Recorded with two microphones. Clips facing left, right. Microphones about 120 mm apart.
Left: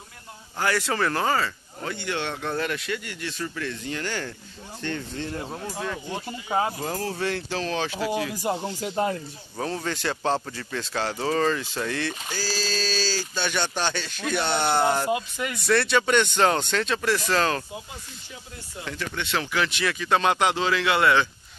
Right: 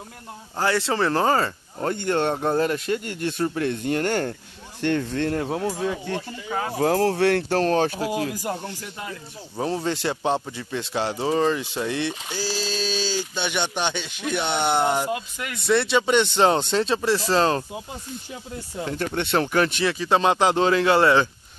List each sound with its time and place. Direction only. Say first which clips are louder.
0.6 s speech: right 3 dB; 25° right (ahead or behind); by 4.4 s 50° right (ahead or behind)
4.8 s speech: right 8 dB; 65° right (ahead or behind)
6.2 s speech: left 3 dB; 25° left (ahead or behind)
6.7 s speech: right 9 dB; 75° right (ahead or behind); by 8.1 s 45° right (ahead or behind)
8.4 s speech: left 2 dB; 10° left (ahead or behind)
9.0 s speech: left 11 dB; 40° left (ahead or behind)
9.6 s a man's voice: right 4 dB; 25° right (ahead or behind)
15.0 s speech: left 2 dB; centre (ahead or behind)
15.6 s a man's voice: right 2 dB; 20° right (ahead or behind)
18.9 s speech: right 5 dB; 40° right (ahead or behind)
19.8 s a man's voice: right 3 dB; 30° right (ahead or behind)